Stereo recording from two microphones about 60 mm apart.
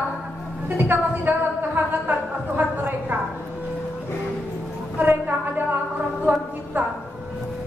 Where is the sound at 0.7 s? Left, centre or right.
Right.